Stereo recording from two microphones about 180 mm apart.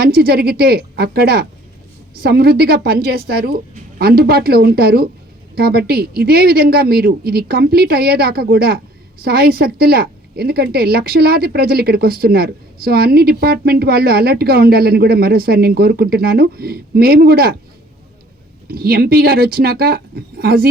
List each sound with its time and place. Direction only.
0.0 s a woman's voice: 60° right (ahead or behind)
18.7 s a woman's voice: 60° right (ahead or behind)